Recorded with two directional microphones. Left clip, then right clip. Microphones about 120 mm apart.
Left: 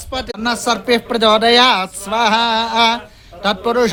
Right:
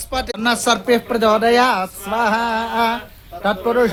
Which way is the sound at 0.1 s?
30° left (ahead or behind).